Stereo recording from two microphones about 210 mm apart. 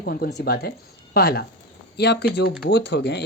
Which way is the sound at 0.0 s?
45° left (ahead or behind).